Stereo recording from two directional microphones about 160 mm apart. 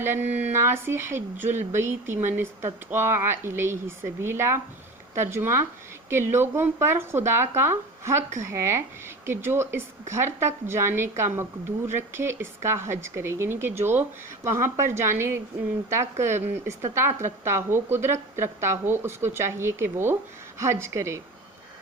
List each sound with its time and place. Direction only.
0.0 s speech: 15° right (ahead or behind)